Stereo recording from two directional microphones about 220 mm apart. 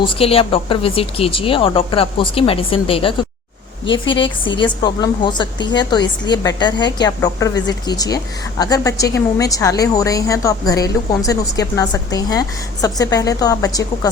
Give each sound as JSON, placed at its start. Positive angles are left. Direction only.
{"t": 0.0, "sound": "a woman's voice", "side_deg": 25}